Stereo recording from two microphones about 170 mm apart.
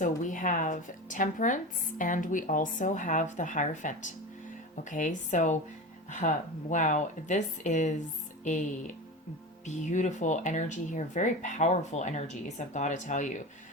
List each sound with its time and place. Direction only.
0.0 s speech: 50° left (ahead or behind)
9.6 s speech: 45° left (ahead or behind)